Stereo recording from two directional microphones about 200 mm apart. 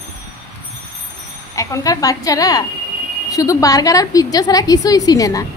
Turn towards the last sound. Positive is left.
turn(degrees=15)  # may be behind; listen again after turning